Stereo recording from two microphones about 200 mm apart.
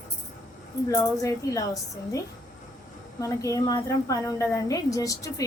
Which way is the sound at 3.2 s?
15° left (ahead or behind).